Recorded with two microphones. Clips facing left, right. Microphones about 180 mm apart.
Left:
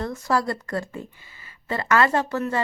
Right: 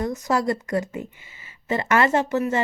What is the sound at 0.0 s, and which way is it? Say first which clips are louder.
Speech: right 2 dB; 20° right (ahead or behind).